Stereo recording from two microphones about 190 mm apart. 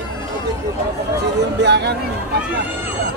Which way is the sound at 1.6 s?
60° right (ahead or behind).